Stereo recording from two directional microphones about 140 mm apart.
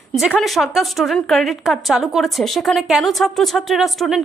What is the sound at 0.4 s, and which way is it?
A woman's voice, centre (ahead or behind).